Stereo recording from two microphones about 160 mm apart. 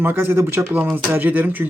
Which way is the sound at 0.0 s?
15° right (ahead or behind).